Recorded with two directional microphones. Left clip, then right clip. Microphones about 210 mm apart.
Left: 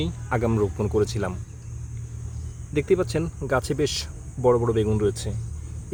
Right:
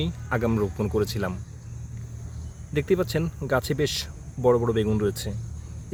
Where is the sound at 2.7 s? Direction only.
Centre (ahead or behind).